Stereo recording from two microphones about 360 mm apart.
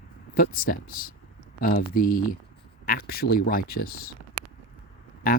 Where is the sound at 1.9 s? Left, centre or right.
Left.